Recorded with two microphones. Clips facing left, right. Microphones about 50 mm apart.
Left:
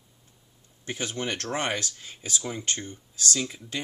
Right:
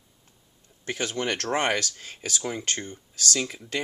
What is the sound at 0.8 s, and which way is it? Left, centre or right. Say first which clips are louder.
Speech: right 3 dB; right.